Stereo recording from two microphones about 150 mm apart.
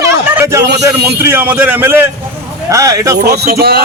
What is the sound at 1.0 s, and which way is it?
A man's voice, 15° right (ahead or behind).